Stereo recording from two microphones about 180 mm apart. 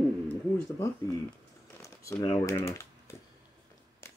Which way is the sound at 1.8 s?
20° left (ahead or behind).